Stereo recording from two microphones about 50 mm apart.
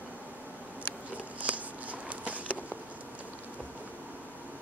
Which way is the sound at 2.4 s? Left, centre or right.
Left.